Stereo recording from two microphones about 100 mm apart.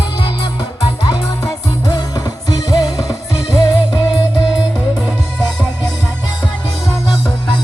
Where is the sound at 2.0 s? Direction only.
35° left (ahead or behind).